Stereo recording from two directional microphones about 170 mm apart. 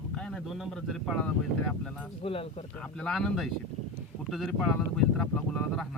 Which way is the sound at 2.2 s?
35° left (ahead or behind).